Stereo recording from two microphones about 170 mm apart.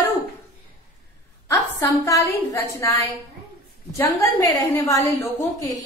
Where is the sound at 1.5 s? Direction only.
20° left (ahead or behind).